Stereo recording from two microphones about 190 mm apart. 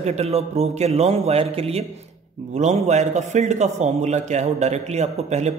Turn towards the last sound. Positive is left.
turn(degrees=-35)  # may be behind; listen again after turning